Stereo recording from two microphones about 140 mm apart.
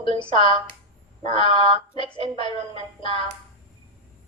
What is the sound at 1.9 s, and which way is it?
A woman's voice, 35° left (ahead or behind).